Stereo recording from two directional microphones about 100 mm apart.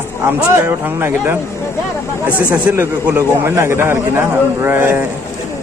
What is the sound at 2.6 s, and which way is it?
Speech, 15° right (ahead or behind).